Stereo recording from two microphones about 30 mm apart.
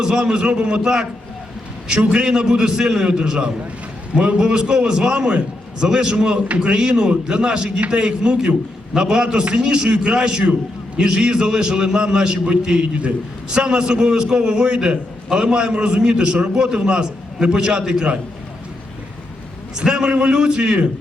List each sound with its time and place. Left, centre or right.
0.0 s a man's voice: right
2.0 s a man's voice: right
12.8 s a man's voice: right
13.5 s a man's voice: right
19.7 s a man's voice: right